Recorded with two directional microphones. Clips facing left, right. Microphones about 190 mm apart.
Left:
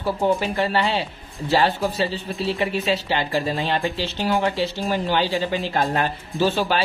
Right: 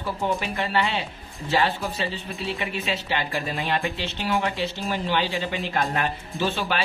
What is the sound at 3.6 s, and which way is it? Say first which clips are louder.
Speech: left 3 dB; 35° left (ahead or behind).